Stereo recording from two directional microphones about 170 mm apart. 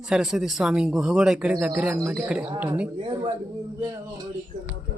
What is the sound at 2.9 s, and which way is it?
Speech, 30° right (ahead or behind).